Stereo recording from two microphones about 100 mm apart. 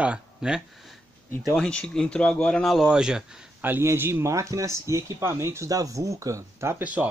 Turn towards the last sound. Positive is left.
turn(degrees=-25)  # may be behind; listen again after turning